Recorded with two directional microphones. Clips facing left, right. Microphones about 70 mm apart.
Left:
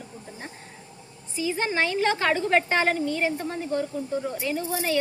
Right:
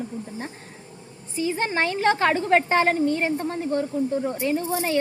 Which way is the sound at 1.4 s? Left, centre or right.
Right.